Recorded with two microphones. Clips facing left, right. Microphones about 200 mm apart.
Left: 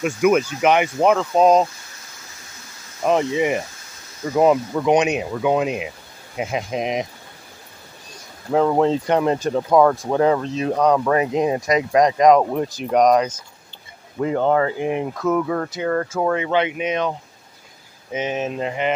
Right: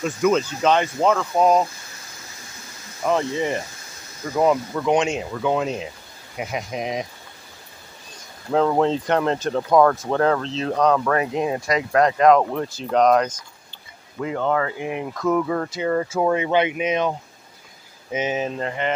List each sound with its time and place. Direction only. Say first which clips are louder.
0.0 s speech: left 3 dB; 10° left (ahead or behind)
3.0 s speech: left 3 dB; 20° left (ahead or behind)
8.5 s speech: left 2 dB; 5° left (ahead or behind)
14.2 s speech: left 4 dB; 35° left (ahead or behind)
15.2 s speech: even; centre (ahead or behind)
18.1 s speech: even; 10° right (ahead or behind)
18.5 s speech: left 2 dB; 15° left (ahead or behind)